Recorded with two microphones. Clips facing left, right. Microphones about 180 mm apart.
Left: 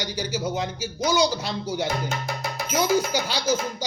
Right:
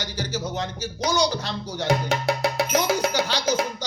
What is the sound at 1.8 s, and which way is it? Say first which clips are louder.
Music: right 5 dB; 90° right.